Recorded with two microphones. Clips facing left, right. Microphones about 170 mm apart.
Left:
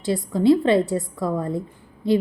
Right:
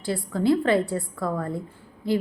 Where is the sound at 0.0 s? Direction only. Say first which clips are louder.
Left 5 dB; 20° left (ahead or behind).